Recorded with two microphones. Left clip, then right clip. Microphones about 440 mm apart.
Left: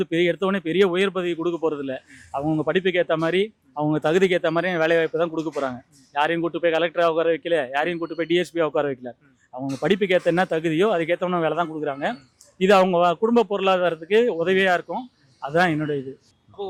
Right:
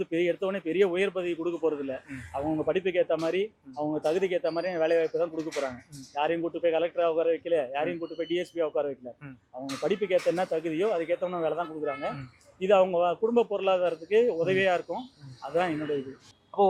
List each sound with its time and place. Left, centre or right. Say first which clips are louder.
0.0 s speech: left 6 dB; left